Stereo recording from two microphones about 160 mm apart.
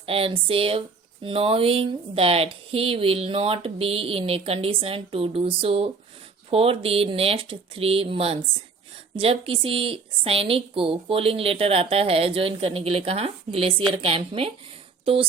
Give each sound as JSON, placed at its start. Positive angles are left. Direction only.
{"t": 0.0, "sound": "speech", "side_deg": -35}